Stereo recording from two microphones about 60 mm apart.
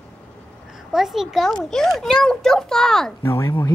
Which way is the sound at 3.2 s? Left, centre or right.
Left.